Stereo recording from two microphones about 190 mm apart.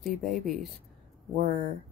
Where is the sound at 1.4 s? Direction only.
50° right (ahead or behind).